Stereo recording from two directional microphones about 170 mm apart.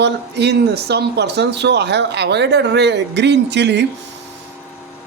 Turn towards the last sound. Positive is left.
turn(degrees=-90)